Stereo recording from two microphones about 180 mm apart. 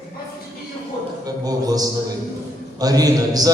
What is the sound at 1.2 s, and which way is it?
A man's voice, 20° right (ahead or behind).